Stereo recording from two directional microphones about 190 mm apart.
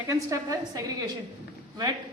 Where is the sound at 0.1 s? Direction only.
15° right (ahead or behind).